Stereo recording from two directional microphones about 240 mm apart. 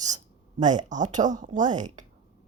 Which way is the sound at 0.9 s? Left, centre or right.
Right.